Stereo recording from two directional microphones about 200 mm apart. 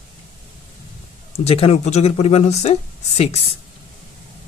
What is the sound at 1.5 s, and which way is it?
Speech, 30° left (ahead or behind).